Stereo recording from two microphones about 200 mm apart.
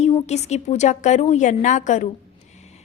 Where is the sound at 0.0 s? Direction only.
30° left (ahead or behind).